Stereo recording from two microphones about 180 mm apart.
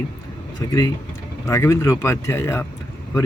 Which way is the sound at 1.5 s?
15° left (ahead or behind).